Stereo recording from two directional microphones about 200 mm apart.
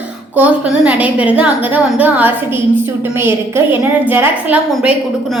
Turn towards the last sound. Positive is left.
turn(degrees=-10)  # may be behind; listen again after turning